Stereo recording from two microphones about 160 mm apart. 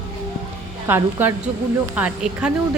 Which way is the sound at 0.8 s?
15° right (ahead or behind).